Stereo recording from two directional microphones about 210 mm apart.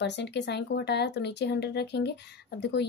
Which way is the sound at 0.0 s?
55° left (ahead or behind).